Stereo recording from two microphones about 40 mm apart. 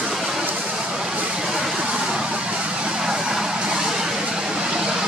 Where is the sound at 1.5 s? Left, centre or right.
Centre.